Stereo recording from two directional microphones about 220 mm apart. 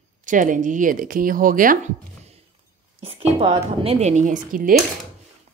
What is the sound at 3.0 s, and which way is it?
Speech, 25° right (ahead or behind).